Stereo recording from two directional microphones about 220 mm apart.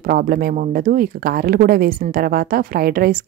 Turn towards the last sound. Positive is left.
turn(degrees=-40)  # may be behind; listen again after turning